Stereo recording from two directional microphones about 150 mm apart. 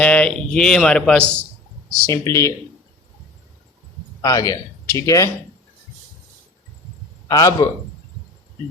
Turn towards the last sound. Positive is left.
turn(degrees=25)  # may be behind; listen again after turning